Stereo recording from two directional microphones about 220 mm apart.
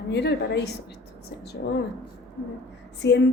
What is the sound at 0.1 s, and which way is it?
Speech, 50° left (ahead or behind).